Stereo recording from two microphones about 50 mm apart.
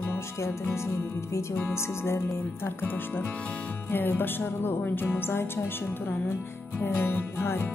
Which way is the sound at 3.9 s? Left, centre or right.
Left.